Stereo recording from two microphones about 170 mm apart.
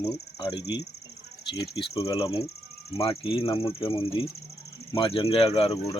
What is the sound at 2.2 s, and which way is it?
Speech, 35° left (ahead or behind).